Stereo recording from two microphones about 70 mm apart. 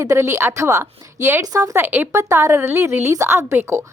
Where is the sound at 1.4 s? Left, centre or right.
Right.